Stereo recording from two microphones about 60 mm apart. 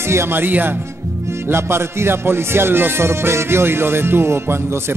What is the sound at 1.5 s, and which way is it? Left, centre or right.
Music, right.